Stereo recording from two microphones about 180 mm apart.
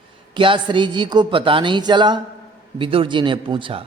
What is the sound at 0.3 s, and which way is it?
A man's voice, 25° right (ahead or behind).